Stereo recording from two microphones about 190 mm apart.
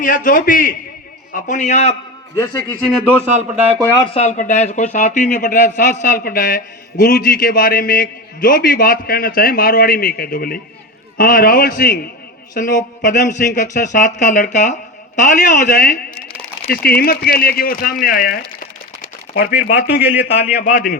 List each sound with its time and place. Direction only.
0.0 s a man's voice: 45° left (ahead or behind)
2.3 s a man's voice: 15° left (ahead or behind)
3.9 s speech: 30° left (ahead or behind); by 20.9 s 45° left (ahead or behind)